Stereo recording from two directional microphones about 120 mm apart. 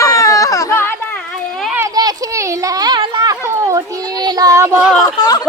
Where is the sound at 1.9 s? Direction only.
35° right (ahead or behind).